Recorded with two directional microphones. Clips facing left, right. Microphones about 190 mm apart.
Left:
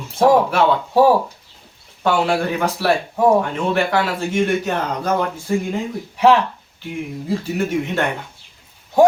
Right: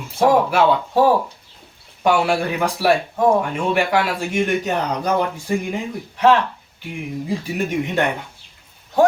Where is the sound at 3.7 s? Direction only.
10° right (ahead or behind).